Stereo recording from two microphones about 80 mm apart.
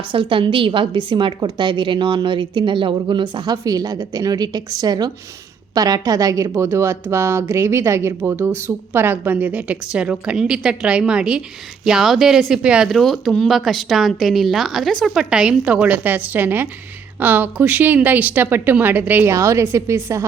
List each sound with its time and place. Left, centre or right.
0.1 s a woman's voice: right; by 12.9 s centre
12.9 s a woman's voice: centre; by 19.3 s right
19.3 s speech: right